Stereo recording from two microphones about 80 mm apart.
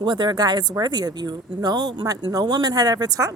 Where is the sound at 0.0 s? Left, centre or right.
Right.